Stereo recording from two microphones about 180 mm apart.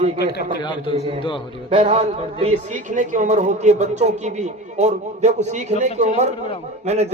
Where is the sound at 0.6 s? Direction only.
25° left (ahead or behind).